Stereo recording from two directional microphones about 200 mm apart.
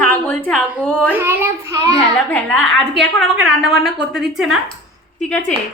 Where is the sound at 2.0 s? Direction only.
5° left (ahead or behind).